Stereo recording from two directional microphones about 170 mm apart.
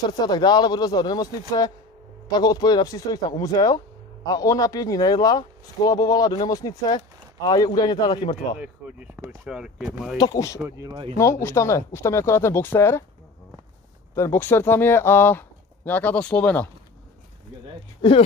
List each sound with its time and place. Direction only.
0.2 s speech: 25° left (ahead or behind)
8.5 s speech: 10° right (ahead or behind)
10.1 s speech: 20° left (ahead or behind)
14.1 s speech: 15° left (ahead or behind)